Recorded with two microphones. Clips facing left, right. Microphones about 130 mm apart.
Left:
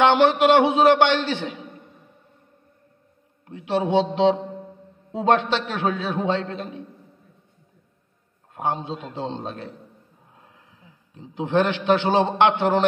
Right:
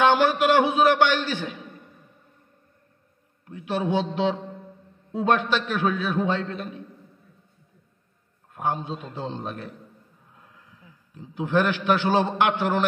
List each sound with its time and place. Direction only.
0.0 s a man's voice: 25° left (ahead or behind)
3.4 s a man's voice: 25° left (ahead or behind)
8.5 s a man's voice: 25° left (ahead or behind)